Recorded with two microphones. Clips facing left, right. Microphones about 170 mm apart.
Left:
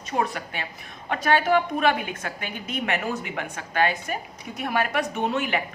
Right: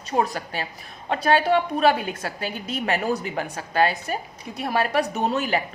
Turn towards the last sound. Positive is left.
turn(degrees=-35)  # may be behind; listen again after turning